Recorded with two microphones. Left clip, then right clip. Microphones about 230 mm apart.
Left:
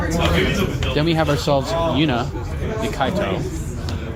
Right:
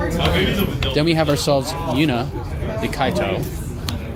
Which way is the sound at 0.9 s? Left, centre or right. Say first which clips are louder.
Right 1 dB; right.